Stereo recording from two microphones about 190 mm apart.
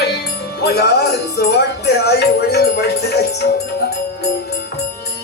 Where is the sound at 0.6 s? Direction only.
60° left (ahead or behind).